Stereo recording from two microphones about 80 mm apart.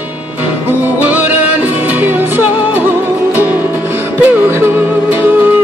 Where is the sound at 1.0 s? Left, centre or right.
Right.